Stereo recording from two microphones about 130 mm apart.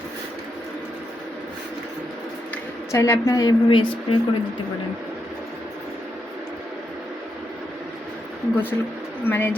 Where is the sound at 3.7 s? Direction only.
40° left (ahead or behind).